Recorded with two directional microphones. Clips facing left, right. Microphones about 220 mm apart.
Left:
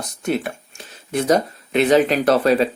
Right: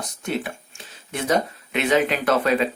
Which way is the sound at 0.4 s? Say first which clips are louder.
Left 4 dB; 40° left (ahead or behind).